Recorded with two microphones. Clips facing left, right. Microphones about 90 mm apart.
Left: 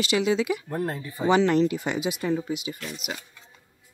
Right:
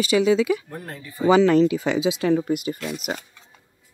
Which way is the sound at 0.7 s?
25° left (ahead or behind).